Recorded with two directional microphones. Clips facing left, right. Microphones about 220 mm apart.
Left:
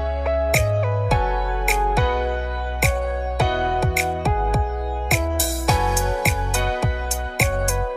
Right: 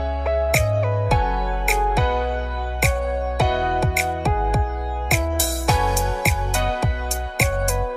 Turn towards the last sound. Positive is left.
turn(degrees=0)  # may be behind; listen again after turning